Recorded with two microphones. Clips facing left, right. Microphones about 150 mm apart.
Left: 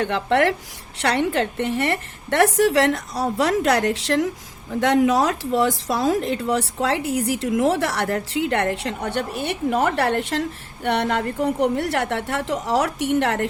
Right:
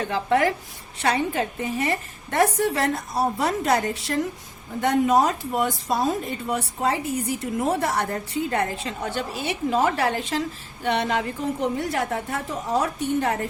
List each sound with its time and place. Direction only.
0.0 s a woman's voice: 70° left (ahead or behind)